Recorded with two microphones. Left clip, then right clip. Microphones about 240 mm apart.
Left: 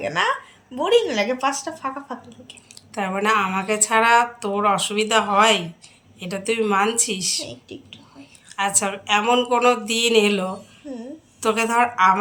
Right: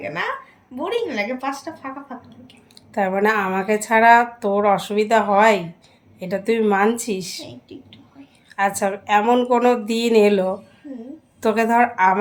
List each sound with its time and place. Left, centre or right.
0.0 s a woman's voice: centre
2.7 s speech: centre
7.4 s a woman's voice: centre
8.5 s speech: centre